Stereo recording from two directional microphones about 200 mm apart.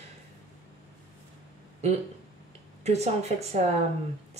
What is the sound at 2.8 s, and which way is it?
Speech, 35° right (ahead or behind).